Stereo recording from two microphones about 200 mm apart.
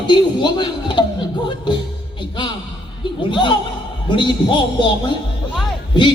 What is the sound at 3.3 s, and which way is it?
Speech, 25° left (ahead or behind).